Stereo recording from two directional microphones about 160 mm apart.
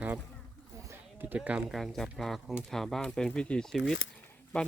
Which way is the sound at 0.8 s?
15° right (ahead or behind).